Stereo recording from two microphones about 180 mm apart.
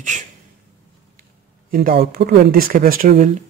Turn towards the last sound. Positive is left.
turn(degrees=-50)  # may be behind; listen again after turning